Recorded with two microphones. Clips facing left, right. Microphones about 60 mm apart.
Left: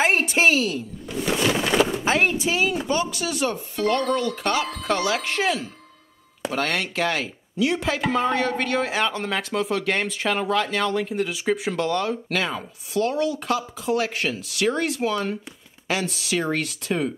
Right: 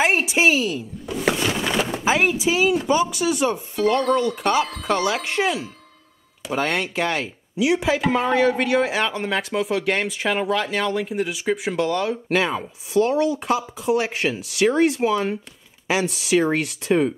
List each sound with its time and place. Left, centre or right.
0.0 s a woman's voice: centre
2.0 s speech: centre
3.5 s speech: centre
12.3 s speech: centre